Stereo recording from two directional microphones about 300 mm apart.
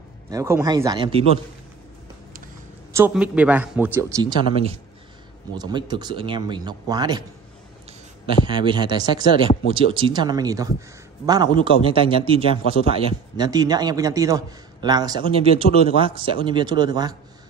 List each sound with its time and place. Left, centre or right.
0.3 s a man's voice: centre
2.9 s a man's voice: centre
8.5 s a man's voice: centre